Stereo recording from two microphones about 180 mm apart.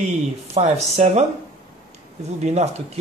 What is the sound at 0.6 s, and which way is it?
Speech, 40° right (ahead or behind).